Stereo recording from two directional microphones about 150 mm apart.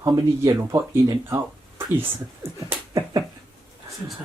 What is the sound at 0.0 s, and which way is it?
Speech, 25° right (ahead or behind).